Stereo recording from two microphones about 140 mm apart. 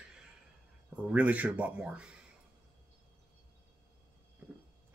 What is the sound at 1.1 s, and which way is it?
Speech, 10° right (ahead or behind).